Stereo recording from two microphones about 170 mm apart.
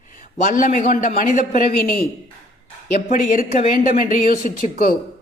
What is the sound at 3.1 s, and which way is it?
Speech, 50° left (ahead or behind).